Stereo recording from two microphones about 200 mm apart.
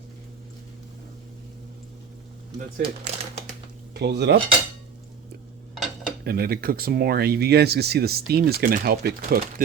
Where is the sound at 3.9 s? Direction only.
55° right (ahead or behind).